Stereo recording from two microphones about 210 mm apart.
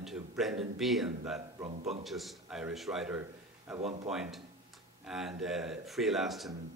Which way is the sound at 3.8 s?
30° right (ahead or behind).